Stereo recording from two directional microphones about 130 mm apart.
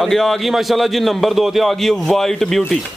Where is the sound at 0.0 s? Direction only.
Centre (ahead or behind).